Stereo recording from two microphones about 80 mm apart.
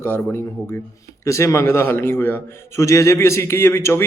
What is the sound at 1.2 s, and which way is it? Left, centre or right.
Speech, left.